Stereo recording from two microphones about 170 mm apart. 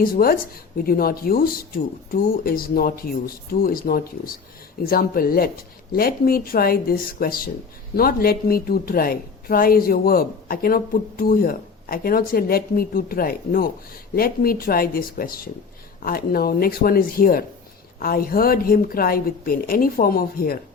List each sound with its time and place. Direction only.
0.0 s a woman's voice: 60° left (ahead or behind)